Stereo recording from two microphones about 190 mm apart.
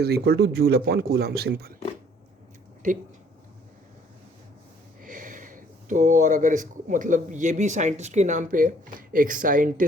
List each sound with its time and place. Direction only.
0.0 s speech: 55° right (ahead or behind)
2.8 s speech: 40° right (ahead or behind)
5.0 s speech: 45° right (ahead or behind)